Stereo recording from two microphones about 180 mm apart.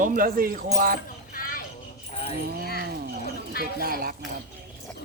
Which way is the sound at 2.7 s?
60° right (ahead or behind).